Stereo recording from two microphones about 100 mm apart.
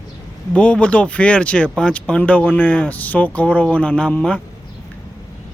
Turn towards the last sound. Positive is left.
turn(degrees=10)  # may be behind; listen again after turning